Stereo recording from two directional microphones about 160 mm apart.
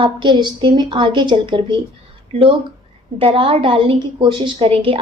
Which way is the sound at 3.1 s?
35° right (ahead or behind).